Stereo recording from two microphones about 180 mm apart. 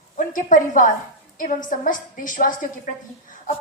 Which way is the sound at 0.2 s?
45° left (ahead or behind).